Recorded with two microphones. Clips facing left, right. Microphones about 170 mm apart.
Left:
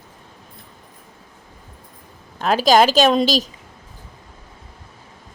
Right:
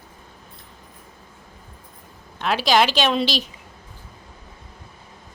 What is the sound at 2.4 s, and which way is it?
A woman's voice, 40° left (ahead or behind).